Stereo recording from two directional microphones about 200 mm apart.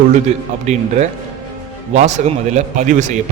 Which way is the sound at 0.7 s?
35° right (ahead or behind).